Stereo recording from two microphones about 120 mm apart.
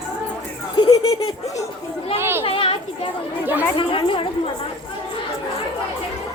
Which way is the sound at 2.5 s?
45° left (ahead or behind).